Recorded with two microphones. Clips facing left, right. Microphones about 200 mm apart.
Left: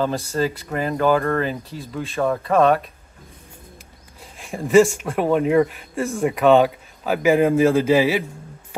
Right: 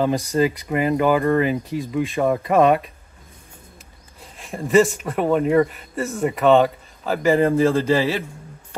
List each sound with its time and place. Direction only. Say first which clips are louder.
0.0 s speech: right 3 dB; 15° right (ahead or behind)
1.7 s speech: right 8 dB; centre (ahead or behind)
2.1 s speech: even; 15° right (ahead or behind)
4.2 s a man's voice: left 1 dB; centre (ahead or behind)
7.3 s a man's voice: left 1 dB; 15° left (ahead or behind)